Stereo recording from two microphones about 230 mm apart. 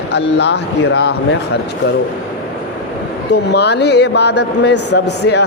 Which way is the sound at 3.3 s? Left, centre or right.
Left.